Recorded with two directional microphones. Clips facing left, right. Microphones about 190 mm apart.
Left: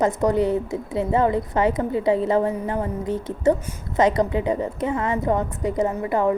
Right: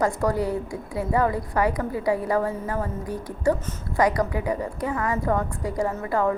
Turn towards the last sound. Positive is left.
turn(degrees=20)  # may be behind; listen again after turning